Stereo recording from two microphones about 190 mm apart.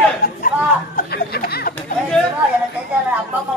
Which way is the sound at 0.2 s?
50° left (ahead or behind).